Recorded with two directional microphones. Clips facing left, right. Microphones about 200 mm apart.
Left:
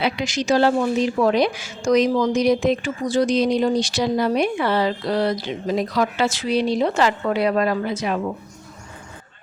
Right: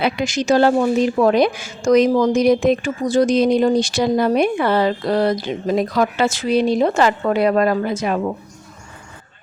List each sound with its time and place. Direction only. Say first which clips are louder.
0.0 s a woman's voice: right 3 dB; 50° right (ahead or behind)